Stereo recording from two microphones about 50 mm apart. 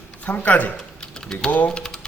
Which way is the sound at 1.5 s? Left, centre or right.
Left.